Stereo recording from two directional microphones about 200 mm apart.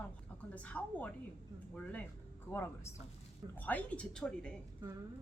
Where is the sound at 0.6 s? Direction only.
5° left (ahead or behind).